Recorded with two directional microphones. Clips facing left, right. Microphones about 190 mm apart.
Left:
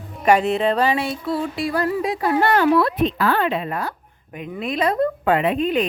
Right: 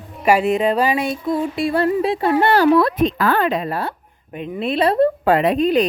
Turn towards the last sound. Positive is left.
turn(degrees=-40)  # may be behind; listen again after turning